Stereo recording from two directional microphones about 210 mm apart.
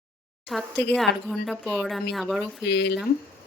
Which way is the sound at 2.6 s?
55° left (ahead or behind).